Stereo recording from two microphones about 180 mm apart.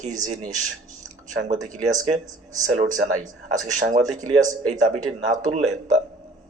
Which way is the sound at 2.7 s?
40° right (ahead or behind).